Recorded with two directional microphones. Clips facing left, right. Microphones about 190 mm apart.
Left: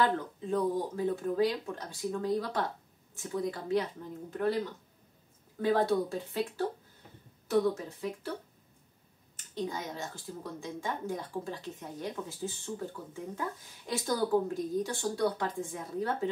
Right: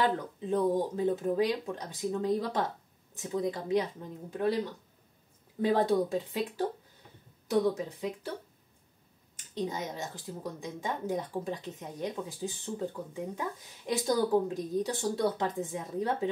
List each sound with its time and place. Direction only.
0.0 s speech: 20° right (ahead or behind)
5.6 s speech: 20° right (ahead or behind)
9.5 s speech: 20° right (ahead or behind)